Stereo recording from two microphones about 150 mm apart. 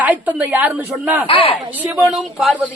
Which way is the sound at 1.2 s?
35° left (ahead or behind).